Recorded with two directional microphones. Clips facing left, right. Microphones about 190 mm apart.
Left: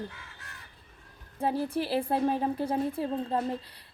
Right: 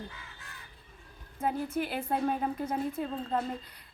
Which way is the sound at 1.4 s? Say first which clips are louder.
Left 2 dB; 30° left (ahead or behind).